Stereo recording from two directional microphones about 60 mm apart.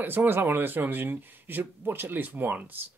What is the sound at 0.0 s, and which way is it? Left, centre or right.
Speech, right.